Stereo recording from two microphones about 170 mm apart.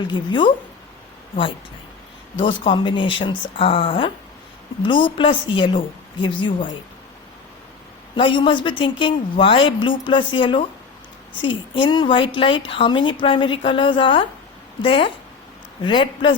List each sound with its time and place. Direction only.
0.1 s a woman's voice: 30° left (ahead or behind)
2.4 s a woman's voice: 30° left (ahead or behind)
8.1 s a woman's voice: 30° left (ahead or behind)